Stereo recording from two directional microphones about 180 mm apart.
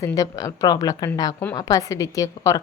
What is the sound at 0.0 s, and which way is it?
Speech, 20° left (ahead or behind).